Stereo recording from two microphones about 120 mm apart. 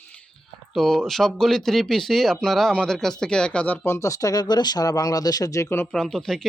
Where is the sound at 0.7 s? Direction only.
Centre (ahead or behind).